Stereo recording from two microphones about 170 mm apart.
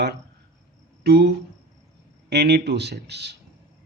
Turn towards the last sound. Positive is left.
turn(degrees=-80)